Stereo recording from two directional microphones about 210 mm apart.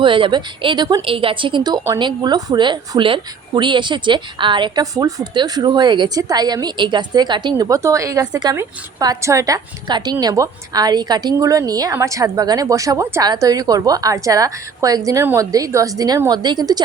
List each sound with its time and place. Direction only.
0.0 s a woman's voice: 25° right (ahead or behind)